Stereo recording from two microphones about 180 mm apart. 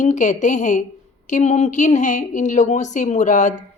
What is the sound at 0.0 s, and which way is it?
Speech, 45° left (ahead or behind).